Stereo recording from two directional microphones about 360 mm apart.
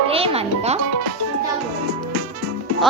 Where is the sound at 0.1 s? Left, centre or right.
Centre.